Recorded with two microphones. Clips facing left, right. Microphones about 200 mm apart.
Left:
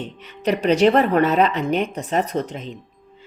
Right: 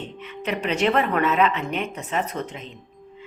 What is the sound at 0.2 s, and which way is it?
A woman's voice, 35° left (ahead or behind).